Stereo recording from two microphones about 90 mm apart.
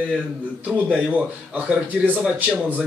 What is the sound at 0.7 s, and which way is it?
Speech, 15° right (ahead or behind).